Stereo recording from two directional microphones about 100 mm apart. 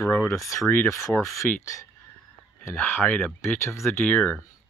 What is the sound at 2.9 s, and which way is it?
Speech, 20° left (ahead or behind).